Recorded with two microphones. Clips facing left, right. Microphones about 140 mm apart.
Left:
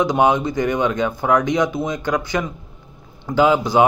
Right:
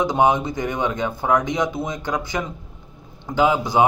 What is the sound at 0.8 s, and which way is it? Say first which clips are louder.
A man's voice: left 3 dB; 20° right (ahead or behind).